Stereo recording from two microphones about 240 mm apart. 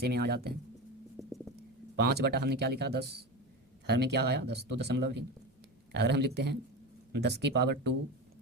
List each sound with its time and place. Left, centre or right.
0.0 s speech: right
2.0 s speech: right